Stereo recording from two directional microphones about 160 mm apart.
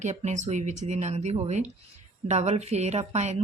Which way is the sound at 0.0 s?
50° right (ahead or behind).